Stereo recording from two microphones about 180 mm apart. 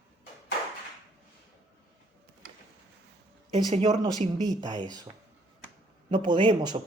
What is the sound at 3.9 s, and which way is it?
A man's voice, 20° right (ahead or behind).